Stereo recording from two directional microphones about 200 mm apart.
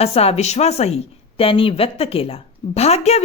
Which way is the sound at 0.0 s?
30° left (ahead or behind).